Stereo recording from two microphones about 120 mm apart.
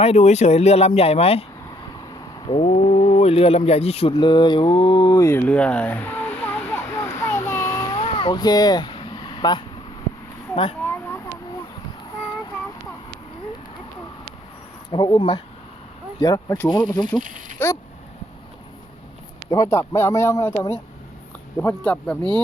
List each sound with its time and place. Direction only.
0.0 s speech: 65° left (ahead or behind)
2.6 s speech: 65° left (ahead or behind)
4.1 s mantra: 40° left (ahead or behind)
5.2 s a sound: 20° left (ahead or behind)
7.9 s vehicle: 50° left (ahead or behind)
8.3 s speech: 35° left (ahead or behind)
10.5 s speech: 50° left (ahead or behind)
10.8 s a sound: 15° left (ahead or behind)
14.8 s mantra: 35° left (ahead or behind)
16.2 s mantra: 30° left (ahead or behind)
17.2 s speech: 90° right
19.5 s speech: 25° left (ahead or behind)
21.8 s speech: 10° left (ahead or behind)